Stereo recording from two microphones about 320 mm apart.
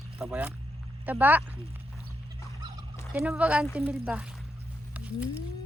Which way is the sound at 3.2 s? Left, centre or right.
Centre.